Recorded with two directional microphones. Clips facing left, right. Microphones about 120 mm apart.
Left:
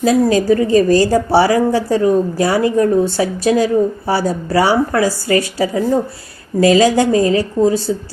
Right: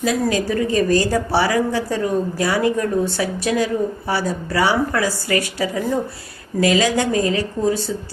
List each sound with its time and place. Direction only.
0.0 s speech: 35° left (ahead or behind)